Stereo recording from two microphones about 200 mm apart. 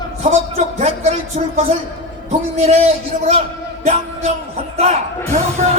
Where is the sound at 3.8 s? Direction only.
35° right (ahead or behind).